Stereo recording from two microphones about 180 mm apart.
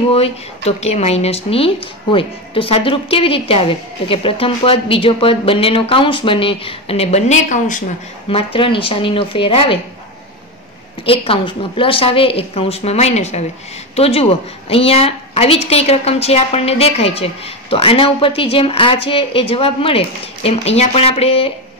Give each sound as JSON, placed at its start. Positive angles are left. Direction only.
{"t": 0.1, "sound": "a woman's voice", "side_deg": 35}
{"t": 8.3, "sound": "a woman's voice", "side_deg": 30}
{"t": 11.1, "sound": "a woman's voice", "side_deg": 30}